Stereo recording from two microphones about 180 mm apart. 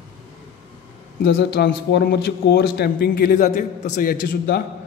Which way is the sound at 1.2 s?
70° left (ahead or behind).